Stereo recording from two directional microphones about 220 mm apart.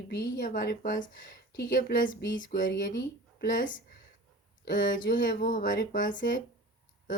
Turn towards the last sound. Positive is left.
turn(degrees=40)  # may be behind; listen again after turning